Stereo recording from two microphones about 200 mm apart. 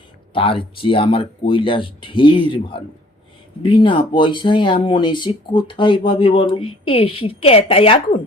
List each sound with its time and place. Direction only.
0.3 s speech: 25° left (ahead or behind)